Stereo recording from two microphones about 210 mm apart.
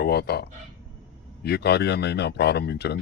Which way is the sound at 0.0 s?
50° left (ahead or behind).